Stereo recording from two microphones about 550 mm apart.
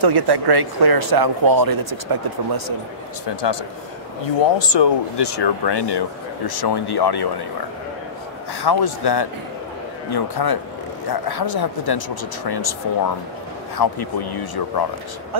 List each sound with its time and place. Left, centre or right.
0.0 s speech: right
3.3 s speech: left
4.6 s speech: left
8.5 s speech: left